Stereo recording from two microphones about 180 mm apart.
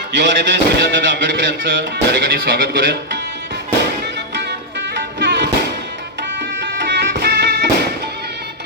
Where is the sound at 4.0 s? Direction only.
75° right (ahead or behind).